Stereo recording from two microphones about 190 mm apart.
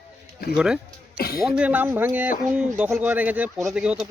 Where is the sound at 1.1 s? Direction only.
55° left (ahead or behind).